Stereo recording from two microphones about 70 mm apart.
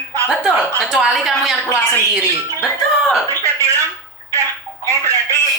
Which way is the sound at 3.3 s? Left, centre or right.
Right.